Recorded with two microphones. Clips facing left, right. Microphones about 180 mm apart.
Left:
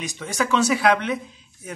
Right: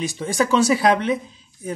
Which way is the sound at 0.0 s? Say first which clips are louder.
Right 5 dB; 30° right (ahead or behind).